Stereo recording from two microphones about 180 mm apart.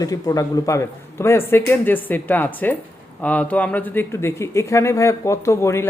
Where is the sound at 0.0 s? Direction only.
20° left (ahead or behind).